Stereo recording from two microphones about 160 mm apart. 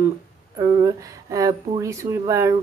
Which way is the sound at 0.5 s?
25° right (ahead or behind).